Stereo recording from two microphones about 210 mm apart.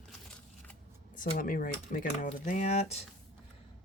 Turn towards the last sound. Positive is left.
turn(degrees=30)  # may be behind; listen again after turning